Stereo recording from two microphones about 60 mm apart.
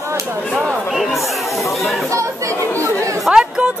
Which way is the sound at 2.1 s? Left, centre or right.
Right.